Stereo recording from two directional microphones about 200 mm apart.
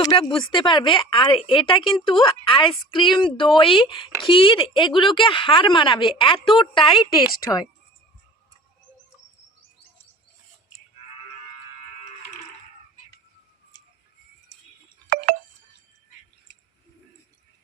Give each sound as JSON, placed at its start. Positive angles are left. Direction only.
{"t": 0.0, "sound": "a woman's voice", "side_deg": 20}